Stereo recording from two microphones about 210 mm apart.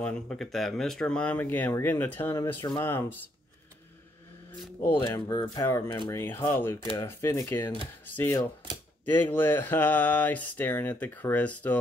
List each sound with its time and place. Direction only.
0.0 s speech: 5° left (ahead or behind)
4.8 s speech: 15° left (ahead or behind)